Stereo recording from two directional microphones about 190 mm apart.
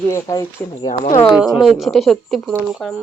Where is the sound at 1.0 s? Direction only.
35° left (ahead or behind).